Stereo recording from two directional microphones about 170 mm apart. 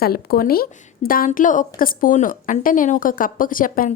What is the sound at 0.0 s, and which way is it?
A woman's voice, 65° left (ahead or behind).